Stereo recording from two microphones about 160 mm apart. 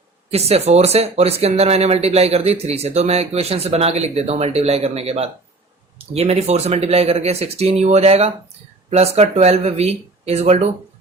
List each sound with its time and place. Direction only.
0.3 s speech: 40° right (ahead or behind)